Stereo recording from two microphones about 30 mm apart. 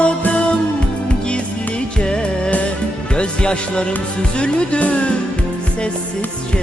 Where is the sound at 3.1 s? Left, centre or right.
Left.